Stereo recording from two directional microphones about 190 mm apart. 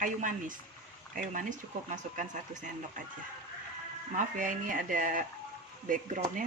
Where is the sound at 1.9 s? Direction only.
40° right (ahead or behind).